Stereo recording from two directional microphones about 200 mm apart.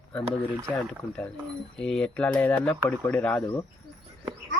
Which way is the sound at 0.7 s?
5° left (ahead or behind).